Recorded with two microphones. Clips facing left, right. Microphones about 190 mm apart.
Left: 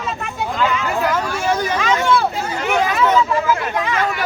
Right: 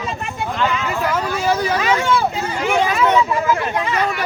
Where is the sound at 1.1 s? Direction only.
5° right (ahead or behind).